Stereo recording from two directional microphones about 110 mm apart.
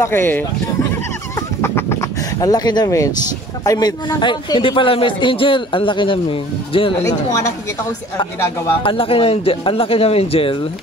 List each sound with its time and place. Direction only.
0.0 s speech: 20° left (ahead or behind)
1.6 s speech: 25° left (ahead or behind)
4.2 s a man's voice: 45° left (ahead or behind)
8.8 s a man's voice: 55° left (ahead or behind)